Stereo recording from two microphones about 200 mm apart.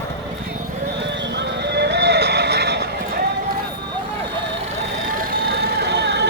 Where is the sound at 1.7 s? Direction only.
55° right (ahead or behind).